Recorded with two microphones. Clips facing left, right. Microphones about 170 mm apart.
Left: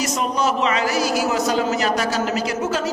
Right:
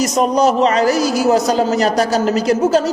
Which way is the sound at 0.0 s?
40° right (ahead or behind).